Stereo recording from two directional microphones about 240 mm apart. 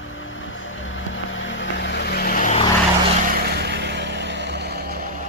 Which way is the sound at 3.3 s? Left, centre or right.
Right.